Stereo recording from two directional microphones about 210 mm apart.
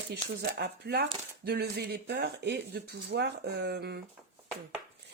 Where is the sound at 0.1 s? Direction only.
50° right (ahead or behind).